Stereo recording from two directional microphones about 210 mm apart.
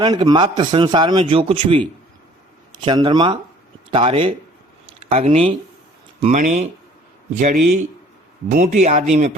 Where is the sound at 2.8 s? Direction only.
20° right (ahead or behind).